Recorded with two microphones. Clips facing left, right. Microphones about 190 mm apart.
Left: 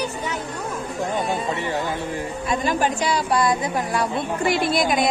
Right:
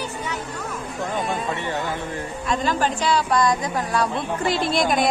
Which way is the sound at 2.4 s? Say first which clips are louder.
Even; 15° left (ahead or behind).